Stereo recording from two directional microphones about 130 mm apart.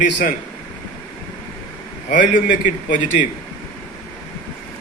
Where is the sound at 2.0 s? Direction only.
80° left.